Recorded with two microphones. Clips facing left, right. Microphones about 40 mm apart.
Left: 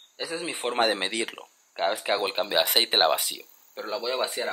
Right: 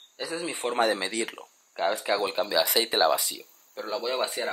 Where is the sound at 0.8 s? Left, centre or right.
Left.